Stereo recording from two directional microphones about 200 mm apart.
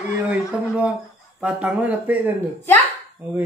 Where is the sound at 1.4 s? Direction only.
5° right (ahead or behind).